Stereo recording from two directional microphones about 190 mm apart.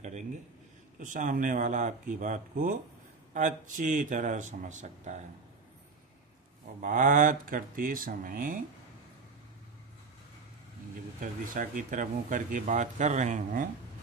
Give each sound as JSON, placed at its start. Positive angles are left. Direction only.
{"t": 0.9, "sound": "speech", "side_deg": -40}
{"t": 6.8, "sound": "speech", "side_deg": -45}
{"t": 11.1, "sound": "speech", "side_deg": -45}